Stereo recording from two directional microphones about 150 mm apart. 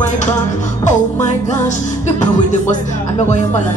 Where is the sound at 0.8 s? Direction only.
55° left (ahead or behind).